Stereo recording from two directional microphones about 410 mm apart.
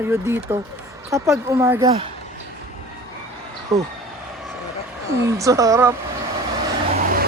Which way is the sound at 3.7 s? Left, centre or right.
Centre.